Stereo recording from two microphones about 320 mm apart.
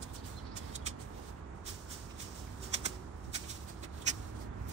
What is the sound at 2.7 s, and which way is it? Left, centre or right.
Shuffling cards, right.